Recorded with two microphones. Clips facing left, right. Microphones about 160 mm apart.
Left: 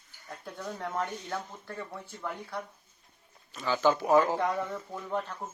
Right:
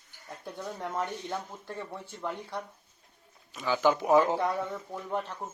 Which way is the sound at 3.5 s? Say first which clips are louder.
Even; 15° right (ahead or behind).